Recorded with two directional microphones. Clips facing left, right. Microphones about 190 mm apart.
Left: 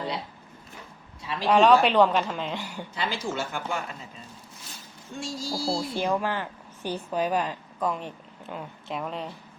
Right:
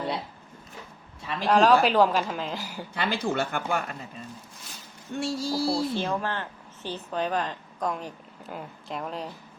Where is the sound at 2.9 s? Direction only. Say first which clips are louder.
Right 3 dB; 60° right (ahead or behind).